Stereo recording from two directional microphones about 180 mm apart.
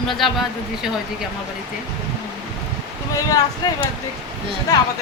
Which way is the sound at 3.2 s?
20° left (ahead or behind).